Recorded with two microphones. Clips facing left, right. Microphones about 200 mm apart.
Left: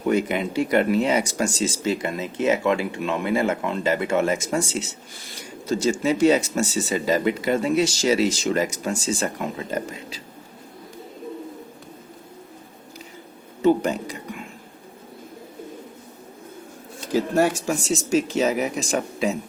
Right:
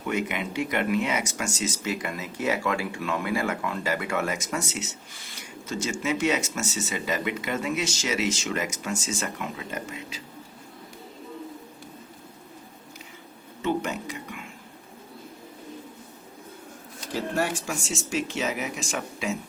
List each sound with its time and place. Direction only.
0.0 s speech: 35° left (ahead or behind)
13.6 s whispering: 35° left (ahead or behind)
17.2 s speech: 40° left (ahead or behind)